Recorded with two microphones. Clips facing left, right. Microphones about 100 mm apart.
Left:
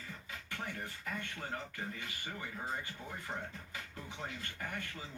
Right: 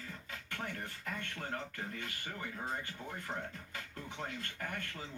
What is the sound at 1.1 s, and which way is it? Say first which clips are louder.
A man's voice: right 1 dB; 10° left (ahead or behind).